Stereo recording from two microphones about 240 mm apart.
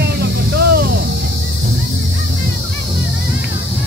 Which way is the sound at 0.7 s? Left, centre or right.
Right.